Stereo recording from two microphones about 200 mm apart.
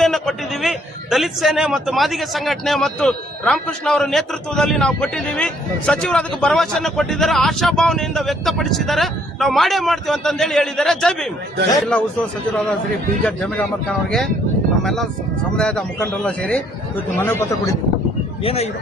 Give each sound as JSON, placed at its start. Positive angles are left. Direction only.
{"t": 0.0, "sound": "a man's voice", "side_deg": 0}
{"t": 15.5, "sound": "a man's voice", "side_deg": 5}
{"t": 18.4, "sound": "speech", "side_deg": 30}